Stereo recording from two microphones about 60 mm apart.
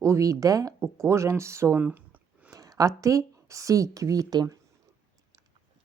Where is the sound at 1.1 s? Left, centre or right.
Right.